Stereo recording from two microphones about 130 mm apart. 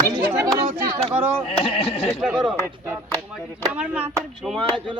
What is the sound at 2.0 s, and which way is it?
Speech, 5° right (ahead or behind).